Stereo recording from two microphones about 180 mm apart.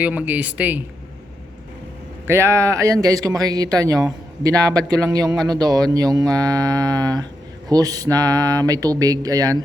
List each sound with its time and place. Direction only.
0.0 s speech: 10° right (ahead or behind)
2.2 s speech: 15° right (ahead or behind)